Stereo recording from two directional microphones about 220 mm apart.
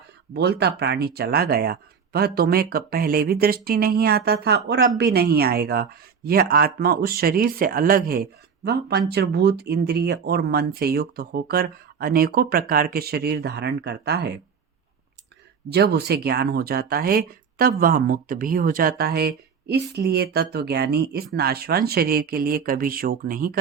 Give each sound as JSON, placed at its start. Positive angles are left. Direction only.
{"t": 0.3, "sound": "speech", "side_deg": -50}
{"t": 15.7, "sound": "speech", "side_deg": -50}